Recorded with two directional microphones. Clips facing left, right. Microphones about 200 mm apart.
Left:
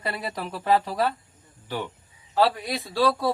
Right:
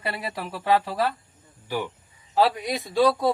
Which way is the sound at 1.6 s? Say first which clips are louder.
Right 2 dB; 10° right (ahead or behind).